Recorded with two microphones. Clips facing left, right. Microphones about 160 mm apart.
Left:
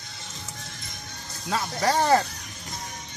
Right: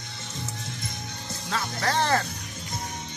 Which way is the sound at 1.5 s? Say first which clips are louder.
Left 3 dB; 15° left (ahead or behind).